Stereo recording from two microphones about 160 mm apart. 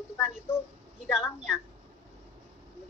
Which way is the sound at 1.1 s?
Centre (ahead or behind).